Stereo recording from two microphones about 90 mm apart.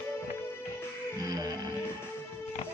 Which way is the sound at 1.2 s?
45° right (ahead or behind).